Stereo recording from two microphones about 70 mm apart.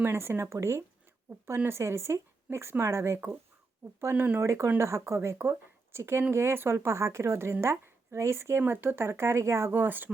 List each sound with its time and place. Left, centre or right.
0.0 s speech: right
4.1 s speech: right
4.4 s speech: right